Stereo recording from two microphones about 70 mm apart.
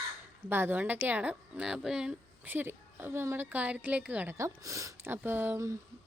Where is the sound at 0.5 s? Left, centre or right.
Right; by 2.1 s centre.